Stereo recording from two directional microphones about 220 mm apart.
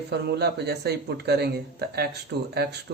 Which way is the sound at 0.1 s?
50° right (ahead or behind).